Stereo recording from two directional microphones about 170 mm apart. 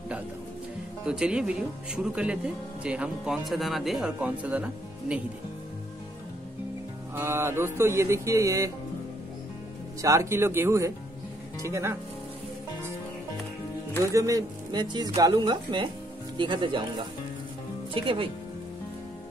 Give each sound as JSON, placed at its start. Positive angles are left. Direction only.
{"t": 1.0, "sound": "speech", "side_deg": -5}
{"t": 7.2, "sound": "speech", "side_deg": -15}
{"t": 10.0, "sound": "speech", "side_deg": -15}
{"t": 14.0, "sound": "a woman's voice", "side_deg": -20}
{"t": 17.9, "sound": "speech", "side_deg": -30}